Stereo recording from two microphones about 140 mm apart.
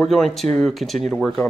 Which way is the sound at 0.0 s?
5° left (ahead or behind).